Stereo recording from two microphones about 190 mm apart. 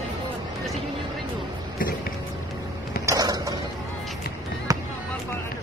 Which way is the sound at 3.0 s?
20° right (ahead or behind).